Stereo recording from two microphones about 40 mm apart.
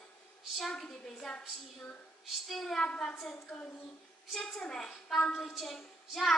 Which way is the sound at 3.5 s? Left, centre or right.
Centre.